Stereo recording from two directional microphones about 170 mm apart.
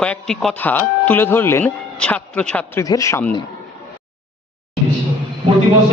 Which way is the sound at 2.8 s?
20° left (ahead or behind).